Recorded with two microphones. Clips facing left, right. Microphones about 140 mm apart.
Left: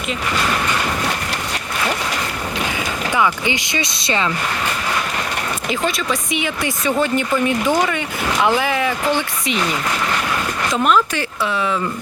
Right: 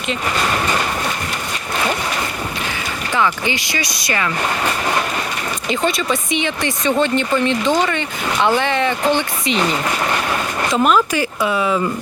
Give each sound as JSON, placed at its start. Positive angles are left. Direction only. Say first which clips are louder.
{"t": 3.2, "sound": "speech", "louder": "right 1 dB", "side_deg": 15}
{"t": 5.6, "sound": "speech", "louder": "right 3 dB", "side_deg": 0}
{"t": 10.7, "sound": "speech", "louder": "right 2 dB", "side_deg": -5}